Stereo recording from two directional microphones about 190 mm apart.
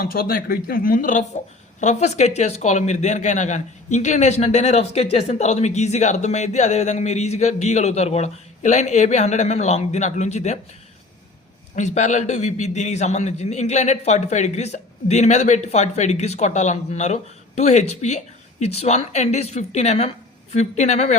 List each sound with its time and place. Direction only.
0.0 s a man's voice: 50° left (ahead or behind)
11.8 s a man's voice: 40° left (ahead or behind)